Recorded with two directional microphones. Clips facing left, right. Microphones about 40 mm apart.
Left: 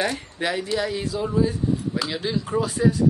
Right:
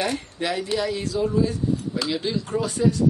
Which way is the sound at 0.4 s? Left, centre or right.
Centre.